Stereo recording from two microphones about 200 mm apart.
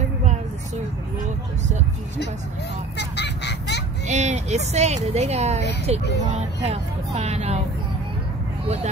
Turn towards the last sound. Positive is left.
turn(degrees=-35)  # may be behind; listen again after turning